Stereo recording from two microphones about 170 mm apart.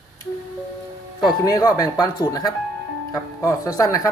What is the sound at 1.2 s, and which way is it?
Speech, 20° left (ahead or behind).